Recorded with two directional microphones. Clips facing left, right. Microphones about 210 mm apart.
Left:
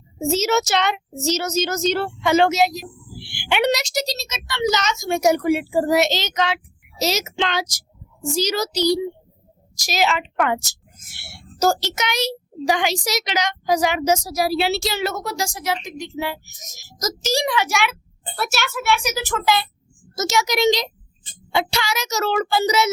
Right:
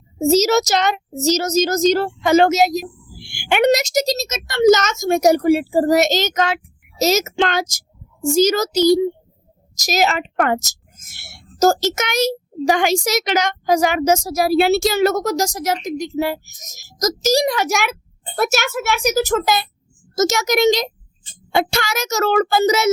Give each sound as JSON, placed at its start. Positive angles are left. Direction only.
{"t": 0.2, "sound": "a woman's voice", "side_deg": -40}